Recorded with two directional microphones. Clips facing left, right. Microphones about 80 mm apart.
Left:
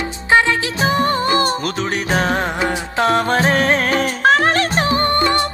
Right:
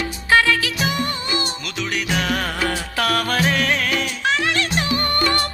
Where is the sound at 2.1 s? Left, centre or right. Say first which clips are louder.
Left 5 dB; left.